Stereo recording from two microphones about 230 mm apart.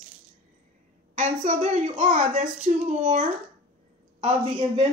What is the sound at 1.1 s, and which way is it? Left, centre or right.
Speech, right.